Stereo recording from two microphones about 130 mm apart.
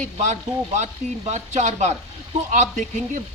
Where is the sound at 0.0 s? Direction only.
65° right (ahead or behind).